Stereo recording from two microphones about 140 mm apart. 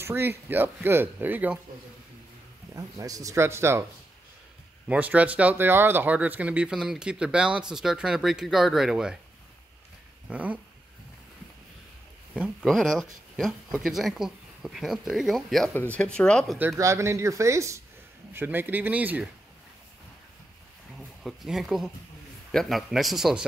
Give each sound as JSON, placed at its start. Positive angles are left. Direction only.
{"t": 0.0, "sound": "speech", "side_deg": -15}
{"t": 2.7, "sound": "speech", "side_deg": -25}
{"t": 4.8, "sound": "speech", "side_deg": -10}
{"t": 10.3, "sound": "speech", "side_deg": -10}
{"t": 12.6, "sound": "speech", "side_deg": 0}
{"t": 15.7, "sound": "speech", "side_deg": 10}
{"t": 16.5, "sound": "speech", "side_deg": -20}
{"t": 21.2, "sound": "speech", "side_deg": 0}